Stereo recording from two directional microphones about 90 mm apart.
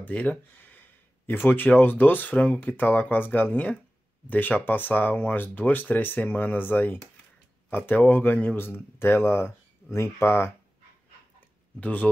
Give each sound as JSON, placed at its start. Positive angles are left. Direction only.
{"t": 0.0, "sound": "speech", "side_deg": 15}
{"t": 11.8, "sound": "speech", "side_deg": 15}